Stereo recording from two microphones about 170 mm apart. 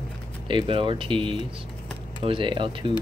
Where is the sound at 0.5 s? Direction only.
30° right (ahead or behind).